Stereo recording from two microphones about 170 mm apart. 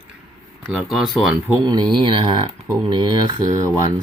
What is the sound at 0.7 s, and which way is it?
Speech, centre (ahead or behind).